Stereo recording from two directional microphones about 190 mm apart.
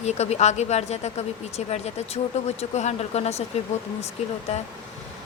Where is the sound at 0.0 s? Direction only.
35° left (ahead or behind).